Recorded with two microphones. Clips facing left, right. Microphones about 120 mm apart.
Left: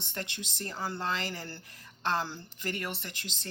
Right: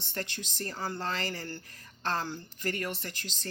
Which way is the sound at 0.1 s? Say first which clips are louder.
Right 2 dB; 20° left (ahead or behind).